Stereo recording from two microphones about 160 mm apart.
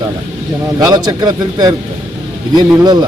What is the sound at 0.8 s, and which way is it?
Speech, 25° right (ahead or behind).